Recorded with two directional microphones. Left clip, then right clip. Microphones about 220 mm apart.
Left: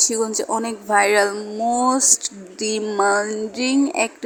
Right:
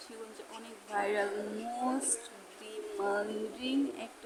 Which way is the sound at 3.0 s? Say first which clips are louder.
Left 14 dB; 45° left (ahead or behind).